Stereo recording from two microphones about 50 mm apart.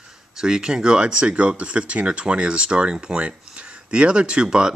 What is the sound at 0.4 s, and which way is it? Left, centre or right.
Speech, centre.